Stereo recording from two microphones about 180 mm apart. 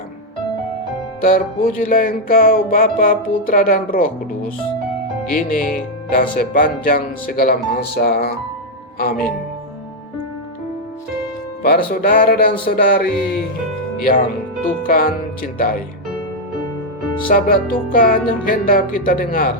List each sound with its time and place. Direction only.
1.2 s music: 50° left (ahead or behind)
5.3 s speech: 50° left (ahead or behind)
11.6 s speech: 60° left (ahead or behind)
14.8 s music: 50° left (ahead or behind)
17.2 s music: 50° left (ahead or behind)